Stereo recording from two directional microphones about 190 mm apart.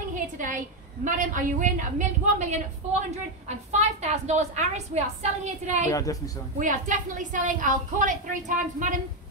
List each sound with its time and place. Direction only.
1.0 s a woman's voice: 45° right (ahead or behind)
5.9 s a woman's voice: 15° left (ahead or behind)
6.6 s a woman's voice: 40° right (ahead or behind)